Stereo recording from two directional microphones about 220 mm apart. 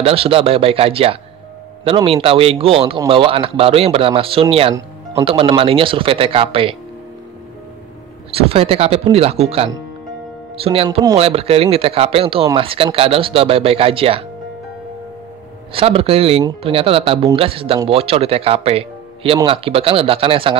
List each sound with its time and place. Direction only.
0.0 s a man's voice: 25° right (ahead or behind)
8.3 s a man's voice: 25° right (ahead or behind)
15.7 s a man's voice: 25° right (ahead or behind)